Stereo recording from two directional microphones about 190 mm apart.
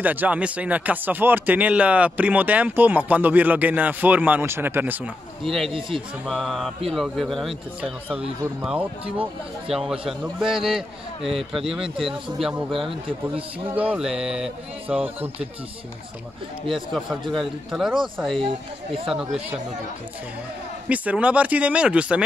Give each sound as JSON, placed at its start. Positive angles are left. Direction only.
{"t": 0.0, "sound": "speech", "side_deg": -10}
{"t": 5.7, "sound": "speech", "side_deg": -25}
{"t": 6.2, "sound": "a man's voice", "side_deg": 0}
{"t": 13.7, "sound": "a man's voice", "side_deg": -5}
{"t": 16.9, "sound": "a man's voice", "side_deg": 0}
{"t": 18.4, "sound": "speech", "side_deg": -30}
{"t": 20.9, "sound": "speech", "side_deg": -5}